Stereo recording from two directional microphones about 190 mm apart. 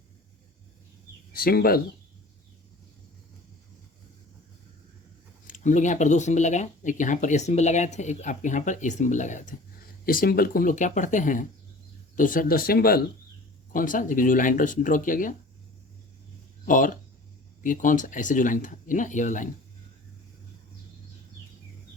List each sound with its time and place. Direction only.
1.3 s speech: 50° left (ahead or behind)
5.5 s speech: 40° left (ahead or behind)
16.6 s speech: 45° left (ahead or behind)